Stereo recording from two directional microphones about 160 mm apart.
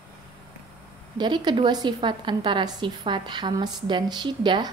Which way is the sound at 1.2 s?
25° right (ahead or behind).